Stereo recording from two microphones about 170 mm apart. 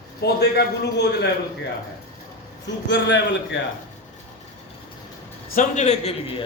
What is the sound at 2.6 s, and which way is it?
Speech, 90° left.